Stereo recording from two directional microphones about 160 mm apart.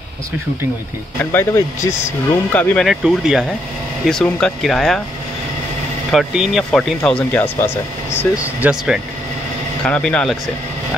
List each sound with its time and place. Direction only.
1.3 s speech: 15° left (ahead or behind)
2.9 s speech: 5° right (ahead or behind)
6.1 s speech: centre (ahead or behind); by 8.6 s 15° left (ahead or behind)
8.6 s speech: 5° right (ahead or behind)
9.8 s speech: 5° left (ahead or behind)